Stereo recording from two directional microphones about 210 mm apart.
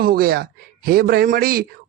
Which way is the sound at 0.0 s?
45° right (ahead or behind).